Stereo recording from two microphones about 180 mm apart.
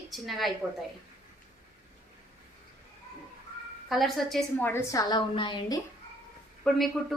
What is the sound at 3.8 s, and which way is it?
Speech, centre (ahead or behind).